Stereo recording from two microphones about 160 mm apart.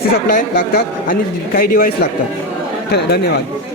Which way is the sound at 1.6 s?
70° left (ahead or behind).